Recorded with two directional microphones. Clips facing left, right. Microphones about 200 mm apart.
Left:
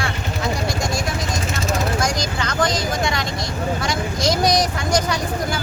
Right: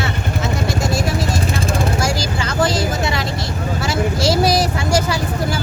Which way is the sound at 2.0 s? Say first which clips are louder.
Right 2 dB; 5° right (ahead or behind).